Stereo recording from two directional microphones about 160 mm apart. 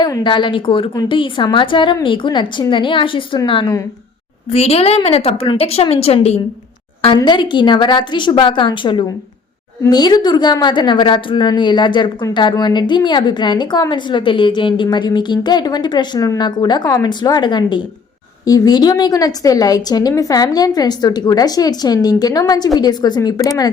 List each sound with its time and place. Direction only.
0.0 s a woman's voice: 30° left (ahead or behind)